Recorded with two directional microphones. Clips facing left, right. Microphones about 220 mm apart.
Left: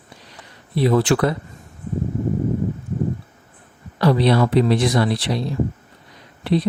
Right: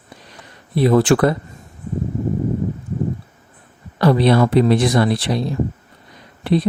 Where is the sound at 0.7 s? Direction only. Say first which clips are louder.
Right 3 dB; 50° right (ahead or behind).